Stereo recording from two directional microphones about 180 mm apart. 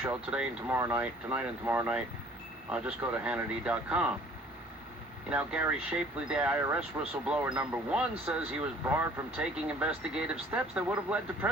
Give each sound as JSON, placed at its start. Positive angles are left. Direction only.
{"t": 0.0, "sound": "speech", "side_deg": -5}
{"t": 5.3, "sound": "speech", "side_deg": -5}